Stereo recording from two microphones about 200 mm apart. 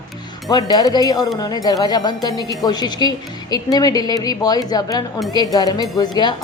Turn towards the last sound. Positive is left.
turn(degrees=20)  # may be behind; listen again after turning